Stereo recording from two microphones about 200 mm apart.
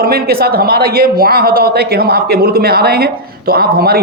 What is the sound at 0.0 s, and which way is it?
Speech, 50° right (ahead or behind).